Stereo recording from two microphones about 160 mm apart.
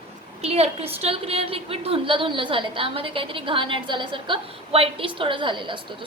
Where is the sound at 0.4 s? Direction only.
40° right (ahead or behind).